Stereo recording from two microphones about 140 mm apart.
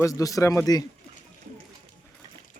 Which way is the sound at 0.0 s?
25° left (ahead or behind).